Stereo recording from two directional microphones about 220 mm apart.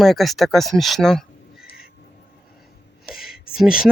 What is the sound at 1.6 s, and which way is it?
Bird, 45° left (ahead or behind).